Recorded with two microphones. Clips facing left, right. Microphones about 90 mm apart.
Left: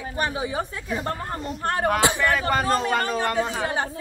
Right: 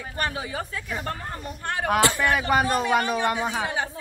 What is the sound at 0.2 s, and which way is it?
Speech, 25° left (ahead or behind).